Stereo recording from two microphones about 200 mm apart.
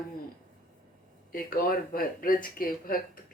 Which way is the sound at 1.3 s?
45° left (ahead or behind).